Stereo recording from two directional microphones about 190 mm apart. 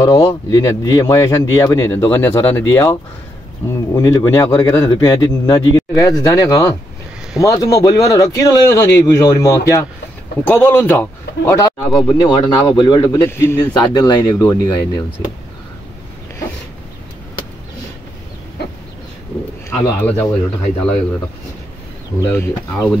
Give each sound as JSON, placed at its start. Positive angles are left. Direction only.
{"t": 0.0, "sound": "speech", "side_deg": 15}
{"t": 19.9, "sound": "speech", "side_deg": 10}
{"t": 22.2, "sound": "speech", "side_deg": 15}